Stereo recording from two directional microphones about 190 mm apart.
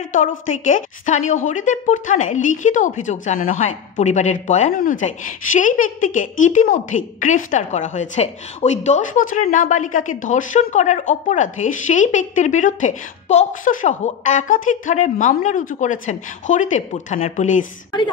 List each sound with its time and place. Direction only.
0.1 s a woman's voice: 40° left (ahead or behind)